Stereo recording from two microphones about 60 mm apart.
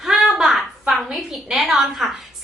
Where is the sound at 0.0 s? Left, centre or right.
Centre.